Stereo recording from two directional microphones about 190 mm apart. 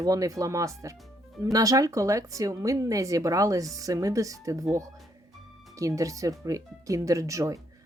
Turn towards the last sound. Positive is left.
turn(degrees=-15)  # may be behind; listen again after turning